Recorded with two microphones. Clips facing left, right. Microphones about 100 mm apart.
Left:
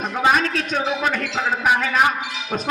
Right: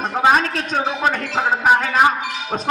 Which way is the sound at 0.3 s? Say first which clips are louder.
Right 2 dB; 40° right (ahead or behind).